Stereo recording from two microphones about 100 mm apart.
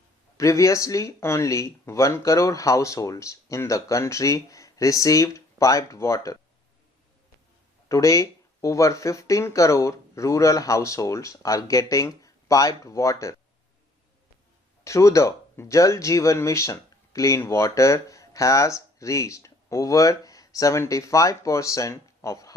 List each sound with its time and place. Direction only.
0.3 s speech: 30° left (ahead or behind)
7.9 s speech: 30° left (ahead or behind)
14.8 s speech: 30° left (ahead or behind)